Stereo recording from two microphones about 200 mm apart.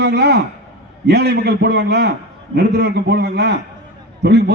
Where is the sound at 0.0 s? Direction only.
55° right (ahead or behind).